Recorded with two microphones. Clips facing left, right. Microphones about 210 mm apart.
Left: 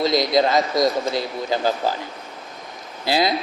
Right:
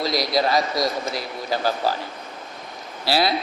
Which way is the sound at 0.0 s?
20° left (ahead or behind).